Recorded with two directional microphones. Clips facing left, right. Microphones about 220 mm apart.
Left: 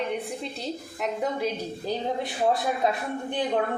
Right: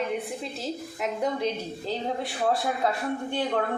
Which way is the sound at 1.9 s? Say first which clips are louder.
Left 2 dB; 20° left (ahead or behind).